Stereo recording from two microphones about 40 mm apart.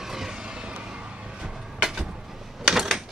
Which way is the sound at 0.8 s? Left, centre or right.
Right.